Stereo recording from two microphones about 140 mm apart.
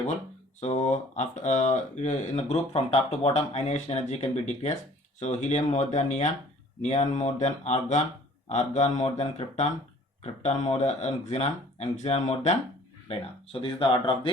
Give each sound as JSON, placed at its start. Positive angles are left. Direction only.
{"t": 0.6, "sound": "speech", "side_deg": 55}
{"t": 13.1, "sound": "speech", "side_deg": 40}